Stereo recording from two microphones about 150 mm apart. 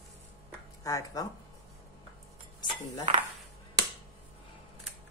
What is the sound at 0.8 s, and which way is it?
Speech, 20° left (ahead or behind).